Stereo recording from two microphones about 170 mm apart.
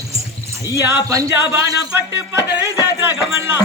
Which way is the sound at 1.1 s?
20° right (ahead or behind).